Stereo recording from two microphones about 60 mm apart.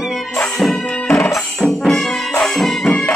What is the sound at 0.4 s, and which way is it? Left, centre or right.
Music, centre.